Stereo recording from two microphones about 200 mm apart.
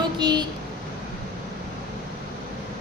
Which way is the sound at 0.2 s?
20° right (ahead or behind).